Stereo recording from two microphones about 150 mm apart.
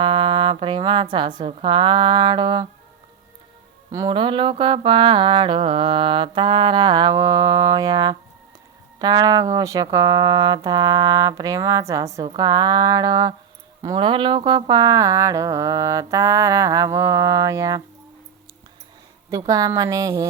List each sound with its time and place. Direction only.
0.0 s mantra: 30° right (ahead or behind)
3.9 s mantra: 30° right (ahead or behind)
9.0 s speech: 25° right (ahead or behind)
19.5 s speech: 25° right (ahead or behind)